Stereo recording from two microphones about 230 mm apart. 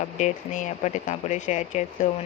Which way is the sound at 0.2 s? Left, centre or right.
Left.